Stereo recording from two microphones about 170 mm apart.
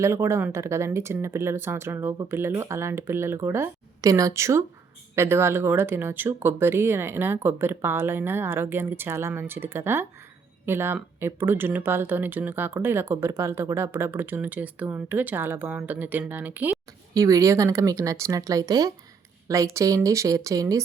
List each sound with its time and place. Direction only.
0.0 s speech: 15° right (ahead or behind)
17.2 s speech: 20° right (ahead or behind)